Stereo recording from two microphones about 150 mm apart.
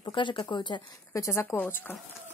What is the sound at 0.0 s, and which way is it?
Speech, 30° left (ahead or behind).